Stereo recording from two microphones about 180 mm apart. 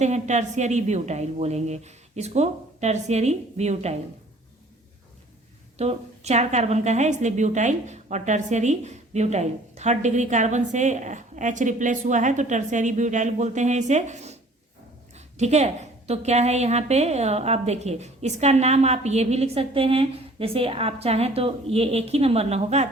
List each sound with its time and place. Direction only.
0.0 s a woman's voice: 40° right (ahead or behind)
5.7 s a woman's voice: 35° right (ahead or behind)
15.4 s a woman's voice: 40° right (ahead or behind)